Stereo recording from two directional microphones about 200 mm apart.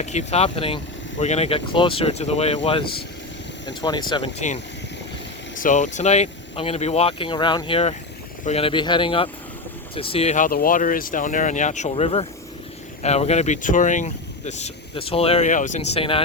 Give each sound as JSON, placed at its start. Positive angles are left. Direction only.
{"t": 0.0, "sound": "speech", "side_deg": 35}
{"t": 3.7, "sound": "speech", "side_deg": 20}
{"t": 4.4, "sound": "speech", "side_deg": 35}